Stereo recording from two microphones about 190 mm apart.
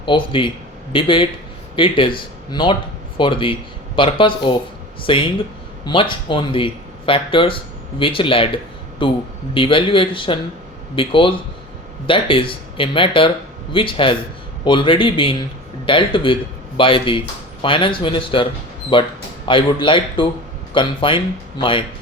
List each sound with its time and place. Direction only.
0.0 s speech: 25° left (ahead or behind)